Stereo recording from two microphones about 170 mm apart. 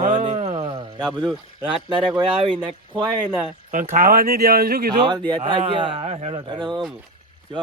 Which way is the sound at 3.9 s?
55° right (ahead or behind).